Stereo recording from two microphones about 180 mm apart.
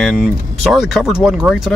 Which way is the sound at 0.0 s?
Centre (ahead or behind).